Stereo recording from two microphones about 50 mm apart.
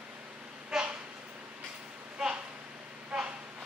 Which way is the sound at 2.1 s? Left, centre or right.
Centre.